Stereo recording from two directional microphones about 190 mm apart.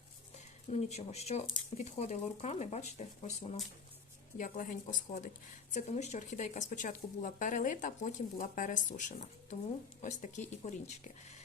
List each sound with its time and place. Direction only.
0.3 s speech: 35° left (ahead or behind)